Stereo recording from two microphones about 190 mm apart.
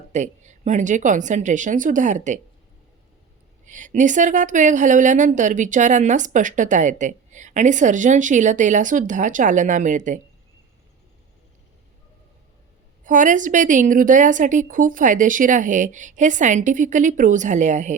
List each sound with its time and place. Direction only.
0.1 s a woman's voice: 40° right (ahead or behind)
3.7 s a woman's voice: 40° right (ahead or behind)
13.1 s a woman's voice: 45° right (ahead or behind)